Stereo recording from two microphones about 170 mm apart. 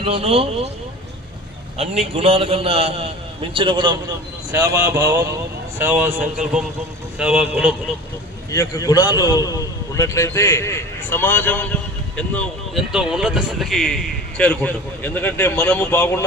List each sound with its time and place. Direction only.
0.0 s a man's voice: 35° right (ahead or behind)
1.8 s a man's voice: 40° right (ahead or behind)
4.5 s a man's voice: 20° right (ahead or behind)
8.5 s a man's voice: 20° left (ahead or behind)